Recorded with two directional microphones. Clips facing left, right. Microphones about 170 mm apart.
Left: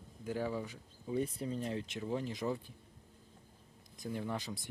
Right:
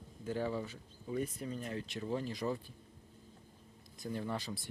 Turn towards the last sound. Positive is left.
turn(degrees=15)  # may be behind; listen again after turning